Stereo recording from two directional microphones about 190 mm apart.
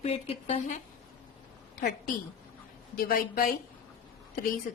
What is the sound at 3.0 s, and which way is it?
Speech, 50° left (ahead or behind).